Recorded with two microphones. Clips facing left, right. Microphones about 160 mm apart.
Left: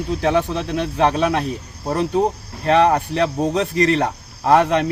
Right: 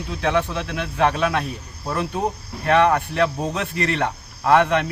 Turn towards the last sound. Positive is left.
turn(degrees=35)  # may be behind; listen again after turning